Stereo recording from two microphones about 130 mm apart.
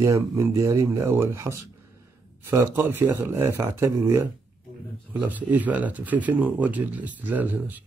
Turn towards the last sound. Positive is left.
turn(degrees=-15)  # may be behind; listen again after turning